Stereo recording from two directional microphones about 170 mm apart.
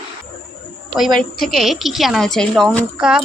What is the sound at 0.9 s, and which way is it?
A woman's voice, centre (ahead or behind).